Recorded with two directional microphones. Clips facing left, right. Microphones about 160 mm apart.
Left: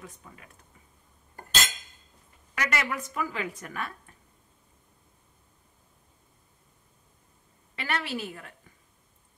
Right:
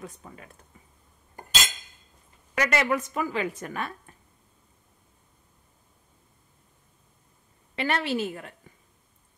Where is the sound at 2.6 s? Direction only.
30° right (ahead or behind).